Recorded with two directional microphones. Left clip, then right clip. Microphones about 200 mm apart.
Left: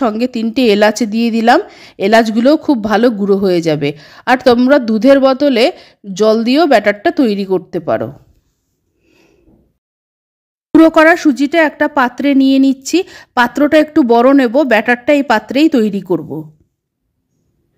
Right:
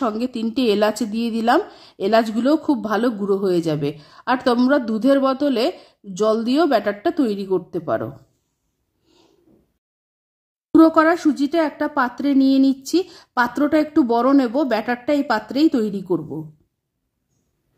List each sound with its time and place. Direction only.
0.0 s speech: 25° left (ahead or behind)
10.7 s speech: 30° left (ahead or behind)